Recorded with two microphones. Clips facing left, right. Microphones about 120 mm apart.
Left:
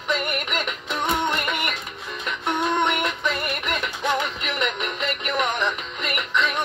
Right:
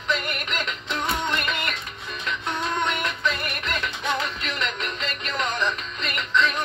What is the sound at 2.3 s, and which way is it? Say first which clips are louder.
Music: left 4 dB; 20° left (ahead or behind).